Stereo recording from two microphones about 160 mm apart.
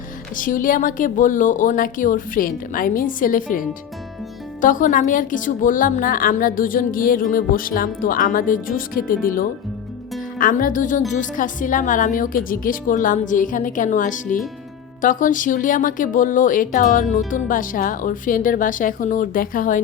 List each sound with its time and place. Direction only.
0.3 s a woman's voice: 55° left (ahead or behind)